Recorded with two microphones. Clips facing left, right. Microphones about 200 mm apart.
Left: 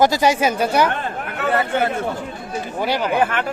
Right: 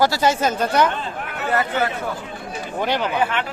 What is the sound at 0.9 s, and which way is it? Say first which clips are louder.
Speech: left 2 dB; 60° left (ahead or behind).